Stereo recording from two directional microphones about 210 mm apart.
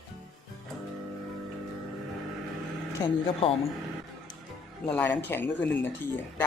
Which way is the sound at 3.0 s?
25° left (ahead or behind).